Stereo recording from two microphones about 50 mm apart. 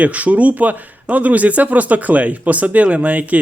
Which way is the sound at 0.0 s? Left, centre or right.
Right.